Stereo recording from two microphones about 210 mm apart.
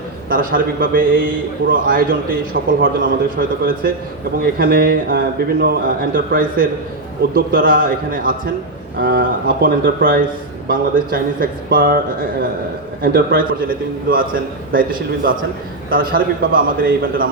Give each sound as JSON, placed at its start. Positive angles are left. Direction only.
{"t": 0.3, "sound": "a man's voice", "side_deg": -45}